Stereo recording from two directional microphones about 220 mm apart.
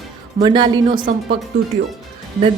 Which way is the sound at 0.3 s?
20° right (ahead or behind).